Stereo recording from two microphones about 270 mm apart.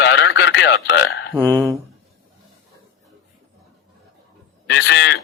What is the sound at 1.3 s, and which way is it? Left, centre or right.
Speech, centre.